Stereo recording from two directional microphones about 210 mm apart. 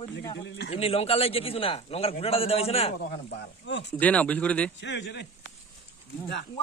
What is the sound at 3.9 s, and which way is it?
Speech, 5° left (ahead or behind).